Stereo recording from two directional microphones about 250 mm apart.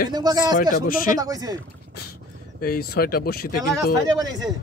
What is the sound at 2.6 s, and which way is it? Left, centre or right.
Speech, left.